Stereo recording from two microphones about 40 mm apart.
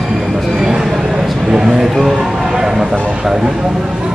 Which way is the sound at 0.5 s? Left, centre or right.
Centre.